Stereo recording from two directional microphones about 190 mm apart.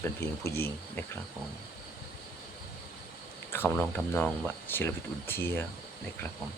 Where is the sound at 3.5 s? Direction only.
10° left (ahead or behind).